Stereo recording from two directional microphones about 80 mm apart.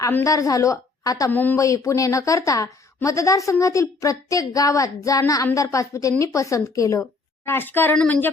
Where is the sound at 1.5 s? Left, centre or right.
Left.